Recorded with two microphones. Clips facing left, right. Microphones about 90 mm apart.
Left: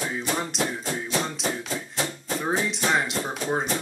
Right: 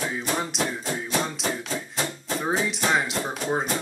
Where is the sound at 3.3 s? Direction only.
Centre (ahead or behind).